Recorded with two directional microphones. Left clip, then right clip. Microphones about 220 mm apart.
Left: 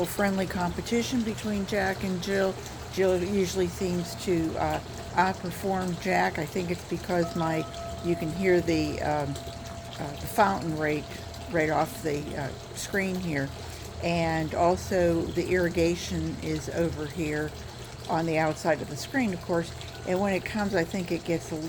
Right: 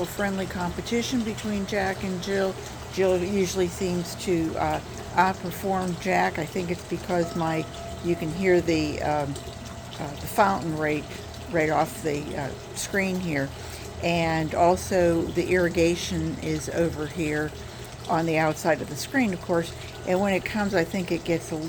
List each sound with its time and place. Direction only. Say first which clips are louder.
0.0 s speech: left 1 dB; 25° left (ahead or behind)
0.9 s speech: right 4 dB; 5° left (ahead or behind)
2.9 s speech: right 2 dB; centre (ahead or behind)
10.3 s speech: right 2 dB; centre (ahead or behind)